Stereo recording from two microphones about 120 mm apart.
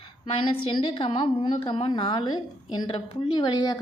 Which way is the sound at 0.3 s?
45° left (ahead or behind).